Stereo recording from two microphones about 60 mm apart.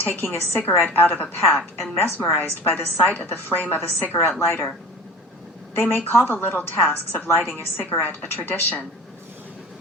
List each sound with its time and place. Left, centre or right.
0.0 s a woman's voice: left
5.7 s a woman's voice: left